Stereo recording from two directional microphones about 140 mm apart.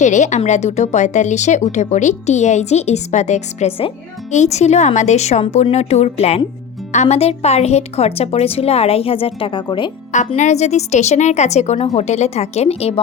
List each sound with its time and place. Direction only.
0.0 s speech: 60° left (ahead or behind); by 3.9 s 40° left (ahead or behind)
4.3 s a woman's voice: 55° left (ahead or behind); by 9.9 s 35° left (ahead or behind)
10.3 s a woman's voice: 55° left (ahead or behind)